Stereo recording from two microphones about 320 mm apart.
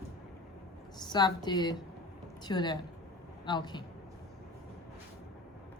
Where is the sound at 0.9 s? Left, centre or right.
Centre.